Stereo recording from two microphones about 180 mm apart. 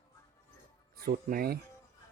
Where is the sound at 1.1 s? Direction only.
50° right (ahead or behind).